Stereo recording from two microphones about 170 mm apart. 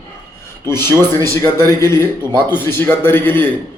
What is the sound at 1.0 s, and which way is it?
Speech, 15° left (ahead or behind).